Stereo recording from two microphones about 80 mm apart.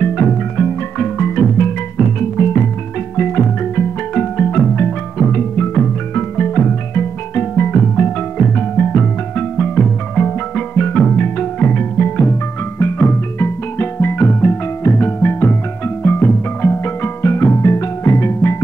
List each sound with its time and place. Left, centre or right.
0.0 s music: centre
12.7 s music: left